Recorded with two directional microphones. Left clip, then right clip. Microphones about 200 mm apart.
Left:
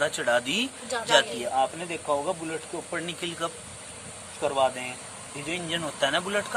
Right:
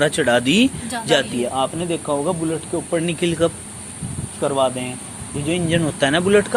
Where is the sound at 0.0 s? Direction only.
15° right (ahead or behind).